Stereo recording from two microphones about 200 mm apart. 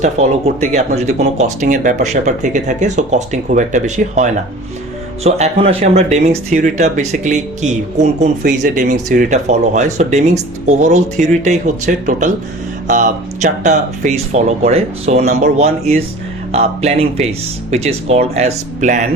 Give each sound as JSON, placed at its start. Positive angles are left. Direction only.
{"t": 0.0, "sound": "speech", "side_deg": -35}